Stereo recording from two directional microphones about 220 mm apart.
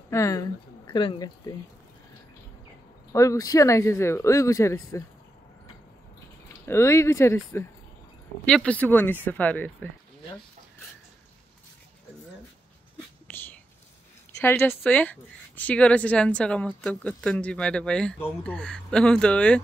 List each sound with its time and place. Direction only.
0.1 s speech: 15° left (ahead or behind)
3.1 s speech: 15° left (ahead or behind)
6.6 s speech: 10° left (ahead or behind)
13.3 s whispering: 10° left (ahead or behind)
14.4 s speech: 10° left (ahead or behind)